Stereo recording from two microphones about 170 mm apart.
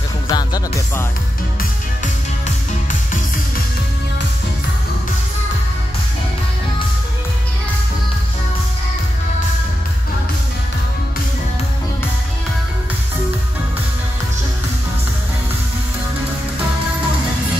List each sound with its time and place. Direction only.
0.3 s music: 25° left (ahead or behind)